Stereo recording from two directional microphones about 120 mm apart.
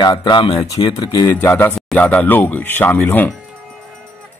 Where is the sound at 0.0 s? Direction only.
40° left (ahead or behind).